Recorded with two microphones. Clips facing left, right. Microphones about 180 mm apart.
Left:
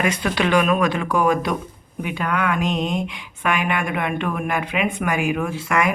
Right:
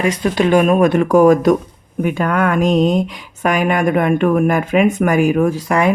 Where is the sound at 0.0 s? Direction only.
35° right (ahead or behind).